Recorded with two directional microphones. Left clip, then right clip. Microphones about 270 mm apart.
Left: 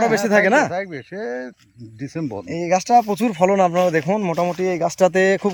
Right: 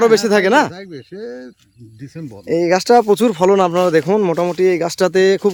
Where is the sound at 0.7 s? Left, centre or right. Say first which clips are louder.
Left 6 dB; centre.